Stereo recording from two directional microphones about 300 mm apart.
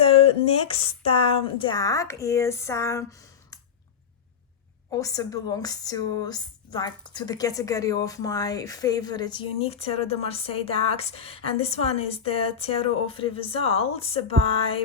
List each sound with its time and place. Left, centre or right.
0.0 s speech: centre
4.9 s speech: centre